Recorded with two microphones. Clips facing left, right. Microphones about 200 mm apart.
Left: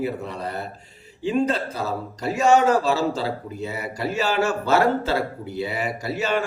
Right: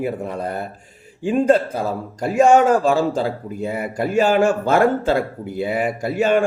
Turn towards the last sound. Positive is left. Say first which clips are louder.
# right 7 dB
turn(degrees=-50)  # may be behind; listen again after turning